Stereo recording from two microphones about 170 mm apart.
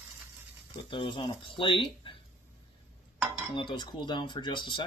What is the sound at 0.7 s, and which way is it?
Speech, 30° left (ahead or behind).